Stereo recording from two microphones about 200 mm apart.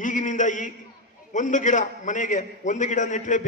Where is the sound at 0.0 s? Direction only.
40° left (ahead or behind).